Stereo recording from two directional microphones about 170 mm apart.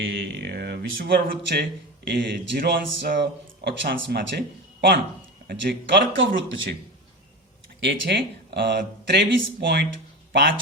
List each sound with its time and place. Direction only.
0.0 s speech: 80° right
2.0 s a man's voice: 90° right
7.8 s speech: 90° right